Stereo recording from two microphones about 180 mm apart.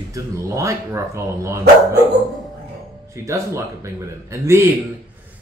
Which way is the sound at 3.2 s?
15° right (ahead or behind).